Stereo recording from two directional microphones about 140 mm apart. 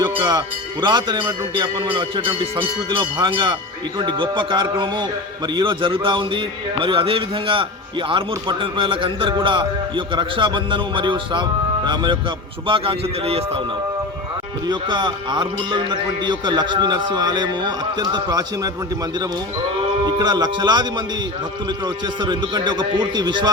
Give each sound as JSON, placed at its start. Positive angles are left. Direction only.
{"t": 0.0, "sound": "speech", "side_deg": -30}
{"t": 12.6, "sound": "speech", "side_deg": -40}
{"t": 14.7, "sound": "speech", "side_deg": -35}
{"t": 20.1, "sound": "speech", "side_deg": -30}